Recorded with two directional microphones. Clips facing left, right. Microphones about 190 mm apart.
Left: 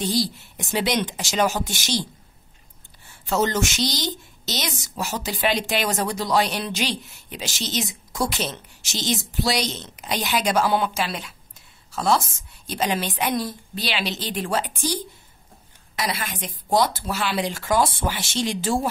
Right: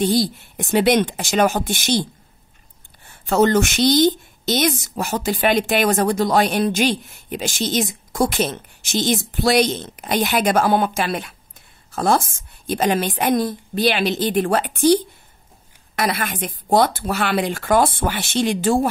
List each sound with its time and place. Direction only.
0.0 s speech: 55° right (ahead or behind)
3.3 s a woman's voice: 55° right (ahead or behind)
16.0 s speech: 55° right (ahead or behind)